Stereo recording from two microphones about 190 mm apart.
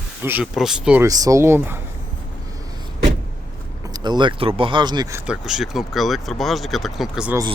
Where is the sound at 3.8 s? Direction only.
20° right (ahead or behind).